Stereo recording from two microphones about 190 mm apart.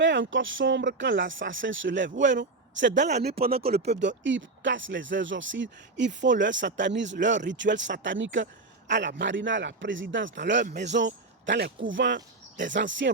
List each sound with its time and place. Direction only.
0.0 s speech: 80° right; by 3.5 s 55° right (ahead or behind)
3.5 s speech: 30° right (ahead or behind)
3.8 s speech: 70° right (ahead or behind)